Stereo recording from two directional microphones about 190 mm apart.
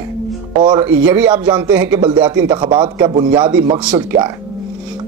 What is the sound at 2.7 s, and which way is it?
Speech, 20° right (ahead or behind).